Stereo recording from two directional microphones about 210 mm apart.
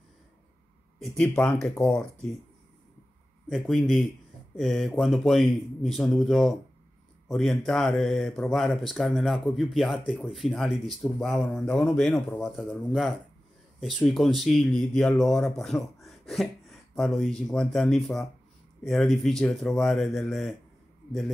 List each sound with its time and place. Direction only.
0.9 s speech: centre (ahead or behind)
3.4 s speech: centre (ahead or behind)